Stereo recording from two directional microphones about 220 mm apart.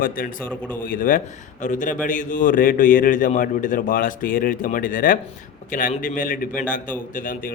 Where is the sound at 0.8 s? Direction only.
40° left (ahead or behind).